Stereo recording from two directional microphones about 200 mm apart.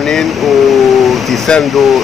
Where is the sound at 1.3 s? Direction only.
5° left (ahead or behind).